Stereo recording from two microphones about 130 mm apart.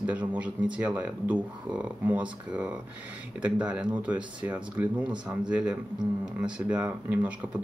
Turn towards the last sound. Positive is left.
turn(degrees=-10)  # may be behind; listen again after turning